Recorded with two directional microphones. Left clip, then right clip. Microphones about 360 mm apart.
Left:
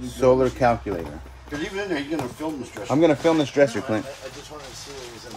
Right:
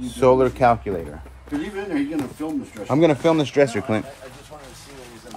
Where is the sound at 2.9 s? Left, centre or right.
Right.